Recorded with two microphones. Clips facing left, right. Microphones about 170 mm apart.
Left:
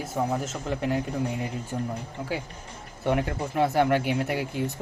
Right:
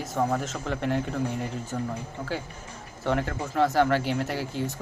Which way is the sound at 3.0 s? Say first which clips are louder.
Left 1 dB; 15° left (ahead or behind).